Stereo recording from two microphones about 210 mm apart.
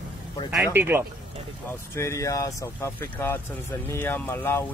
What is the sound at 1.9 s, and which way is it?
Speech, 15° left (ahead or behind).